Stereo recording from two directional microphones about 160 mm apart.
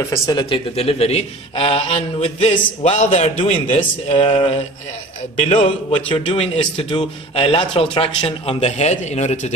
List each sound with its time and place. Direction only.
0.0 s a man's voice: 20° left (ahead or behind); by 9.5 s 45° left (ahead or behind)